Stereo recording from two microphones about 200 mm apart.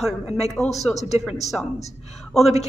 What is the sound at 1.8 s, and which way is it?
Speech, 35° left (ahead or behind).